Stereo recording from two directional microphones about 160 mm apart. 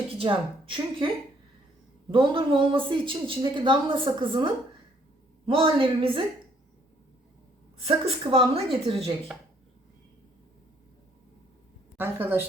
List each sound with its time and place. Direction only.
0.2 s a woman's voice: 35° right (ahead or behind)
5.5 s a woman's voice: 35° right (ahead or behind)
8.0 s a woman's voice: 35° right (ahead or behind)
11.9 s a woman's voice: 10° right (ahead or behind)